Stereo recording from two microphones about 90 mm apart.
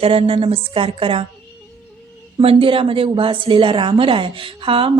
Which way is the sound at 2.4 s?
85° right.